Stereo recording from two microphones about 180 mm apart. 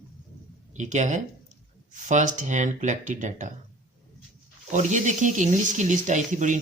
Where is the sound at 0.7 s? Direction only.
40° right (ahead or behind).